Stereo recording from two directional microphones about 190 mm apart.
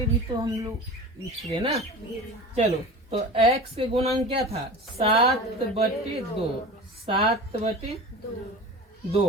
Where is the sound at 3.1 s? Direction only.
30° right (ahead or behind).